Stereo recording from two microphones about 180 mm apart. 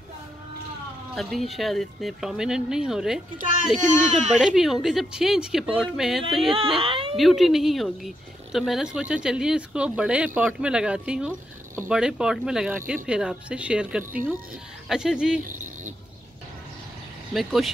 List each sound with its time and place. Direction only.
1.1 s speech: centre (ahead or behind)
3.8 s speech: 40° right (ahead or behind)
4.4 s speech: 5° right (ahead or behind)
6.5 s speech: 30° right (ahead or behind)
7.2 s speech: centre (ahead or behind)
17.3 s speech: centre (ahead or behind)